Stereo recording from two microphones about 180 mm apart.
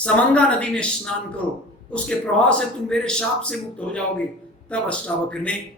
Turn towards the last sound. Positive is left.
turn(degrees=5)  # may be behind; listen again after turning